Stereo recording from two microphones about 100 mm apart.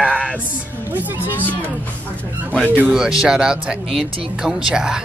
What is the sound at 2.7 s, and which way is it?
A child's voice, 10° right (ahead or behind).